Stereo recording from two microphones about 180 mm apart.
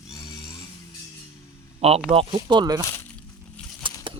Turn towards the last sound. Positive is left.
turn(degrees=-25)  # may be behind; listen again after turning